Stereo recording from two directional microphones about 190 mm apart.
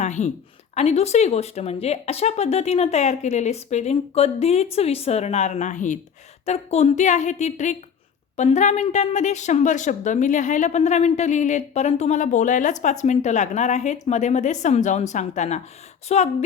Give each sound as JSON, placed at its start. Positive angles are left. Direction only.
{"t": 0.0, "sound": "a woman's voice", "side_deg": 35}